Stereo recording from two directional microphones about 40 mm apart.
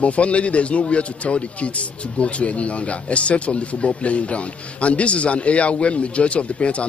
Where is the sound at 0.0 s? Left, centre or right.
Left.